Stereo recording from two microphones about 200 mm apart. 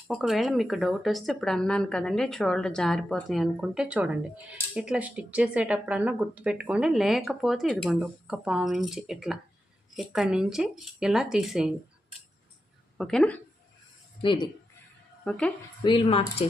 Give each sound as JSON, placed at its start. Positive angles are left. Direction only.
{"t": 0.1, "sound": "speech", "side_deg": 0}
{"t": 13.0, "sound": "speech", "side_deg": 5}
{"t": 14.2, "sound": "speech", "side_deg": 20}
{"t": 15.2, "sound": "a woman's voice", "side_deg": 5}
{"t": 15.8, "sound": "speech", "side_deg": 25}